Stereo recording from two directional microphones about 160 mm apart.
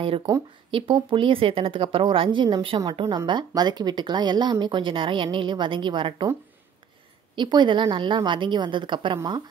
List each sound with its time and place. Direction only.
0.7 s a woman's voice: 35° right (ahead or behind)
7.3 s a woman's voice: 30° right (ahead or behind)